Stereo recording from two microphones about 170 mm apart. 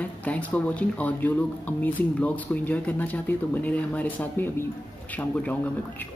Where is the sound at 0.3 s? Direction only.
10° left (ahead or behind).